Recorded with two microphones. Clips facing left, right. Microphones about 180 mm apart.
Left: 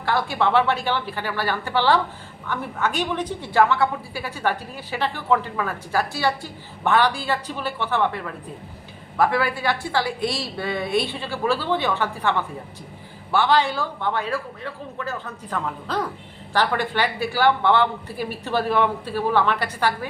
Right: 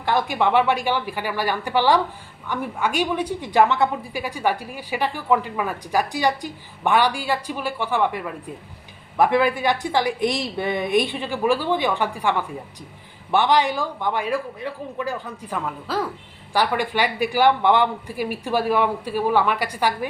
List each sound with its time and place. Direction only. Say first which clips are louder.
0.0 s a woman's voice: right 1 dB; 15° right (ahead or behind)